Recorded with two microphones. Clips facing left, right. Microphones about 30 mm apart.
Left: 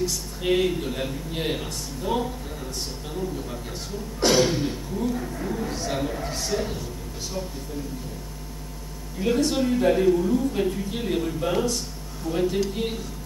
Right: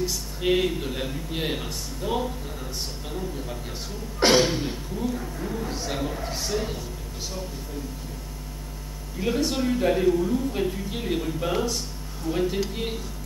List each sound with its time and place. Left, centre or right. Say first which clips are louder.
0.0 s speech: even; centre
4.2 s a sound: right 1 dB; right
4.5 s speech: left 2 dB; centre
5.1 s speech: left 2 dB; centre
9.2 s speech: left 2 dB; centre